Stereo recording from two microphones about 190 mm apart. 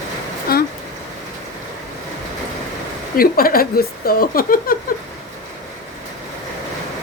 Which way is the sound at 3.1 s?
50° left (ahead or behind).